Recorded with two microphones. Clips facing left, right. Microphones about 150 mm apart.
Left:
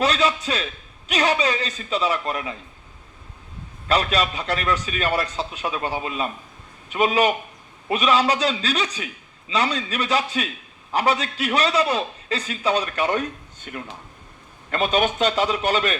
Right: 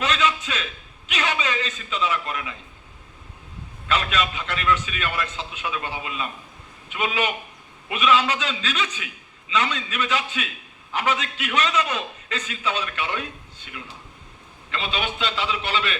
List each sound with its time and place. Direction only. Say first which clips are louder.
0.0 s a man's voice: left 3 dB; 35° left (ahead or behind)
3.8 s a man's voice: left 3 dB; 35° left (ahead or behind)